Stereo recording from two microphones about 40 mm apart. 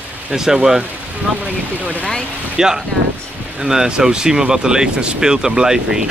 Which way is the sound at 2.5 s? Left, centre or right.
Centre.